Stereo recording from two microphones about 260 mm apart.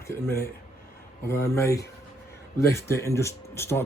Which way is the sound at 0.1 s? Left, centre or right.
Centre.